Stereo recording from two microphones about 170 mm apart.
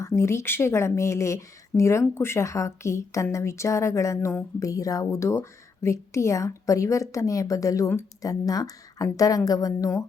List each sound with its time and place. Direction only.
0.0 s a woman's voice: 15° left (ahead or behind)